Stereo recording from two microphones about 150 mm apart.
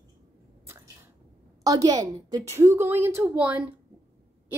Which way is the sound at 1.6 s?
25° right (ahead or behind).